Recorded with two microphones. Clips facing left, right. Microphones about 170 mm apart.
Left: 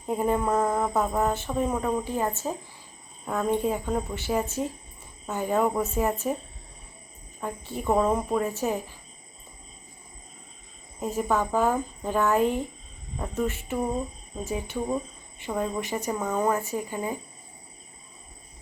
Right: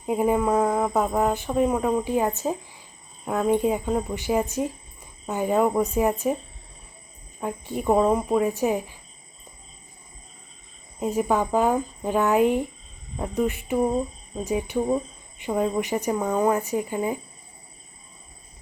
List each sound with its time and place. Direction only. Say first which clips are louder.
0.0 s speech: right 3 dB; 10° right (ahead or behind)
7.4 s speech: right 4 dB; 15° right (ahead or behind)
11.0 s speech: right 3 dB; 15° right (ahead or behind)